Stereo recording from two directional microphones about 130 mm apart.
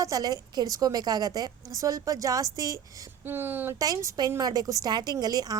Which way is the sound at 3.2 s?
15° right (ahead or behind).